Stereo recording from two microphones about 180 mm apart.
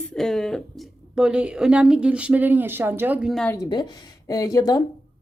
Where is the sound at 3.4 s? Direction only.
20° left (ahead or behind).